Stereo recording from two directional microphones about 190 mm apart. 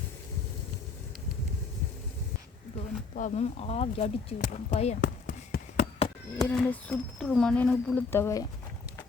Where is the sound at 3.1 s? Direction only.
40° left (ahead or behind).